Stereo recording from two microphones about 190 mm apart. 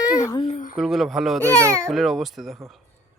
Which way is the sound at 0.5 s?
45° left (ahead or behind).